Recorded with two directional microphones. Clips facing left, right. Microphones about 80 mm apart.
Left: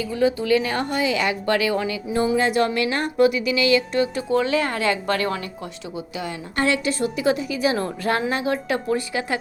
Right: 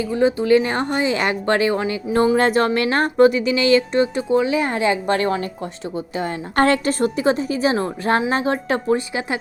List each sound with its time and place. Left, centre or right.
0.0 s speech: right
2.1 s speech: right
6.1 s a woman's voice: right
7.3 s speech: right
9.0 s speech: right